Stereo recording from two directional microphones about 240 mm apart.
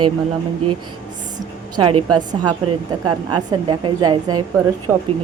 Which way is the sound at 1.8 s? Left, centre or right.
Right.